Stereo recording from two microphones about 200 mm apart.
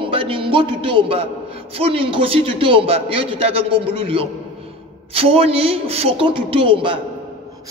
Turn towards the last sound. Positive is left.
turn(degrees=-25)  # may be behind; listen again after turning